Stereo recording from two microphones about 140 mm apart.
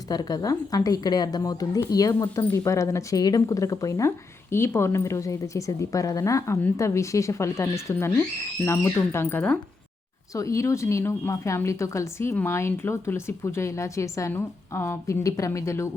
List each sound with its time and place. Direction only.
0.1 s speech: 30° left (ahead or behind)